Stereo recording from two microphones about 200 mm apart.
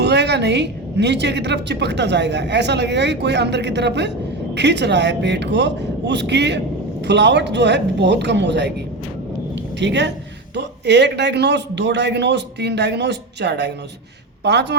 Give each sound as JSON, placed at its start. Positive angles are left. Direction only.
{"t": 0.0, "sound": "a woman's voice", "side_deg": -55}
{"t": 9.7, "sound": "a woman's voice", "side_deg": -60}